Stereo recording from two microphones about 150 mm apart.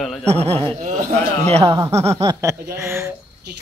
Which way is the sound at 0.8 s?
55° right (ahead or behind).